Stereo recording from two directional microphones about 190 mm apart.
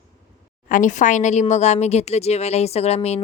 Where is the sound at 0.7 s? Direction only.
45° left (ahead or behind).